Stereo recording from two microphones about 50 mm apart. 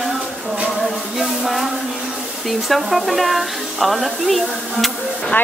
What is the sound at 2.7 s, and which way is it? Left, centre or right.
Speech, centre.